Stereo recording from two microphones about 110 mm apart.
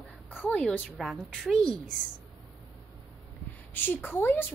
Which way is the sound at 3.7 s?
20° left (ahead or behind).